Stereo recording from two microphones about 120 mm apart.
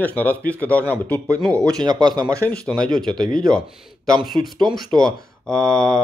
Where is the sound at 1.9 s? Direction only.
35° right (ahead or behind).